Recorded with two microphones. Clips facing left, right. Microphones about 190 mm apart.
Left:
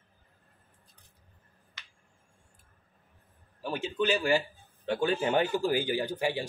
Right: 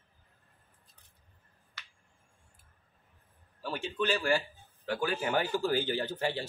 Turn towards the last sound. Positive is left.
turn(degrees=15)  # may be behind; listen again after turning